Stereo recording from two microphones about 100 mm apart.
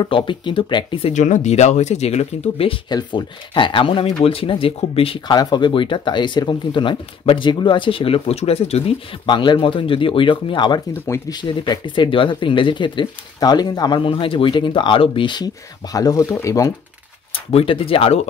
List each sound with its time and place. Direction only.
0.0 s speech: 55° left (ahead or behind)
0.9 s speech: 85° left
2.9 s speech: 45° left (ahead or behind); by 5.2 s 70° left (ahead or behind)
5.3 s speech: 45° left (ahead or behind); by 8.9 s 85° left
9.2 s speech: 50° left (ahead or behind)
10.9 s speech: 30° left (ahead or behind)
11.6 s speech: 50° left (ahead or behind)
14.0 s speech: 60° left (ahead or behind); by 16.7 s 30° left (ahead or behind)
17.5 s speech: 70° left (ahead or behind)